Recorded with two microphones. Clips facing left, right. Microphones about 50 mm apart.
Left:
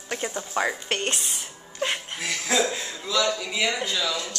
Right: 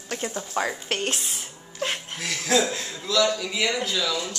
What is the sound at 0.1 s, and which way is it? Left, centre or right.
Speech, centre.